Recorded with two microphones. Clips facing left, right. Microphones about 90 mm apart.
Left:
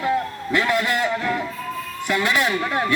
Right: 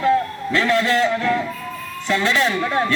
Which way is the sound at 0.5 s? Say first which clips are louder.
Right 3 dB; 15° left (ahead or behind).